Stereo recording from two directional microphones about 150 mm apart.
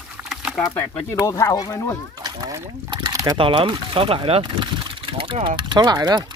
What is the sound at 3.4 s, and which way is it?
Speech, 35° right (ahead or behind).